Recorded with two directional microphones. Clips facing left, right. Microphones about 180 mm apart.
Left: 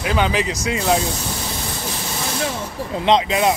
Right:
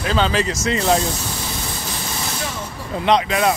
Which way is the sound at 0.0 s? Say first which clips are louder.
Even; 15° left (ahead or behind).